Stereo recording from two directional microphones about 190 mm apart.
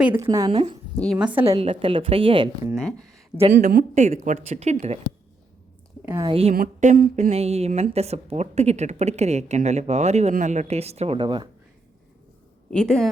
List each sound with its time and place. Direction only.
0.1 s a woman's voice: 20° right (ahead or behind)
0.5 s a woman's voice: 30° right (ahead or behind)
0.9 s speech: centre (ahead or behind)
1.5 s a woman's voice: 30° right (ahead or behind)
2.7 s speech: centre (ahead or behind)
3.6 s a woman's voice: 45° right (ahead or behind)
6.1 s a woman's voice: 25° right (ahead or behind)
6.5 s a woman's voice: 45° right (ahead or behind); by 11.4 s 25° right (ahead or behind)
12.7 s speech: 5° left (ahead or behind)